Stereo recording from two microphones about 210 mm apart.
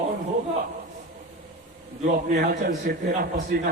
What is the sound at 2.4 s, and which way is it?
A man's voice, 45° right (ahead or behind).